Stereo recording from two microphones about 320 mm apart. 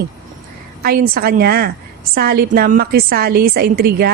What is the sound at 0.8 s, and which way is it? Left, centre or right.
A woman's voice, right.